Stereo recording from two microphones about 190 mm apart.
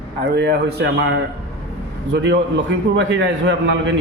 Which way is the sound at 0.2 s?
60° right (ahead or behind).